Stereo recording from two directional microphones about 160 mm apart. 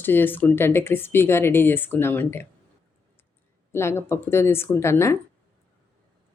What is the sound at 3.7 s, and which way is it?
A woman's voice, 15° left (ahead or behind).